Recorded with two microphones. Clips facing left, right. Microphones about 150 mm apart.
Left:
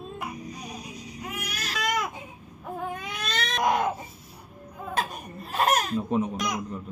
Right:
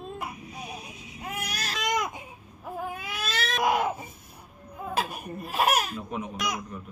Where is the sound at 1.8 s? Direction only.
20° right (ahead or behind).